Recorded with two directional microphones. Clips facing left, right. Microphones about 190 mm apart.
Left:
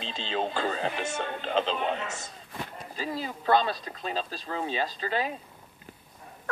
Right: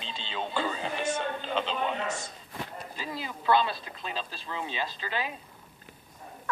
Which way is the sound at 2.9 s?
40° left (ahead or behind).